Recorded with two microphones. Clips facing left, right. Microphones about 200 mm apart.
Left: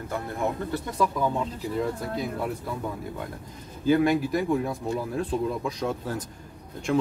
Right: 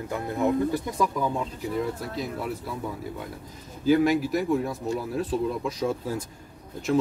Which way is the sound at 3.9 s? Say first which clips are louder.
Right 1 dB; centre (ahead or behind).